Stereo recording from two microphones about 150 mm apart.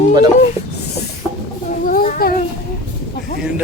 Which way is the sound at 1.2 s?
20° left (ahead or behind).